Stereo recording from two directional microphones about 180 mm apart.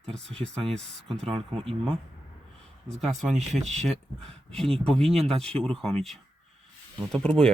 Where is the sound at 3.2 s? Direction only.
Centre (ahead or behind).